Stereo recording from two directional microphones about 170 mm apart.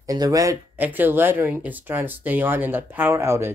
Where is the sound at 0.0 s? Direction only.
20° right (ahead or behind).